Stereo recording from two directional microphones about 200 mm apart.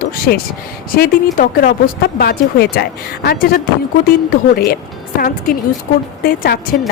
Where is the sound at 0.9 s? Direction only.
45° left (ahead or behind).